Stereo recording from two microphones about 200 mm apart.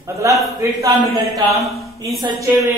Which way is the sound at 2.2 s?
15° right (ahead or behind).